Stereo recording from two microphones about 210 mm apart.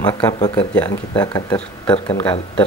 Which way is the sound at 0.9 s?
20° left (ahead or behind).